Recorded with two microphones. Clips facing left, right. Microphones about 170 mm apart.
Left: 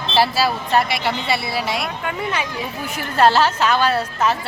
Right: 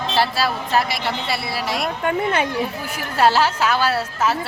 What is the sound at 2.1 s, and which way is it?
Speech, 55° right (ahead or behind).